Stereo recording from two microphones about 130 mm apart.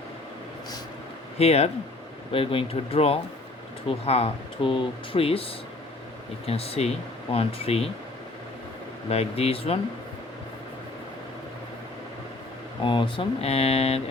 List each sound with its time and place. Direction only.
1.4 s speech: 55° left (ahead or behind)
9.0 s speech: 50° left (ahead or behind)
12.8 s speech: 40° left (ahead or behind)